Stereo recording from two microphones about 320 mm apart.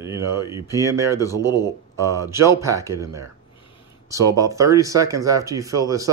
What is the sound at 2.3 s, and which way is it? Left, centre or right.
Speech, centre.